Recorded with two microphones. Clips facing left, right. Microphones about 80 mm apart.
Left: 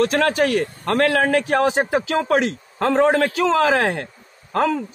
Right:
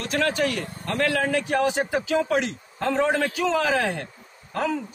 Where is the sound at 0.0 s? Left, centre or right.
Left.